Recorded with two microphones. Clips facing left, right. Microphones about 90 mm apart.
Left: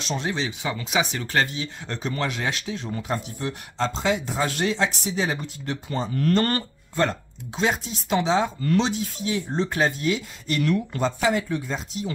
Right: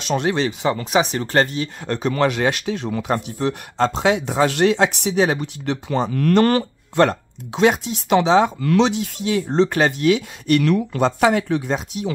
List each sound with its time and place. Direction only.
0.0 s speech: 60° right (ahead or behind)